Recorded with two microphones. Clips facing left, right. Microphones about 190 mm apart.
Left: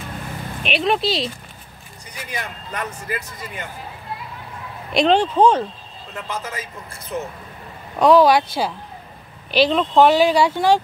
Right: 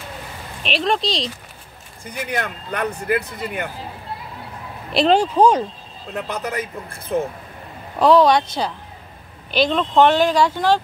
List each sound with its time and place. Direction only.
0.6 s speech: centre (ahead or behind)
2.0 s speech: 60° right (ahead or behind)
4.9 s speech: 5° right (ahead or behind)
6.1 s speech: 65° right (ahead or behind)
8.0 s speech: centre (ahead or behind)